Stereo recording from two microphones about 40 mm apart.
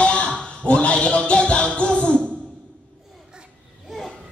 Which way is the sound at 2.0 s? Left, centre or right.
Left.